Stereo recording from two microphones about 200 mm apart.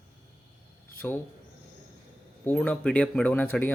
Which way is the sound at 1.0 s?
10° left (ahead or behind).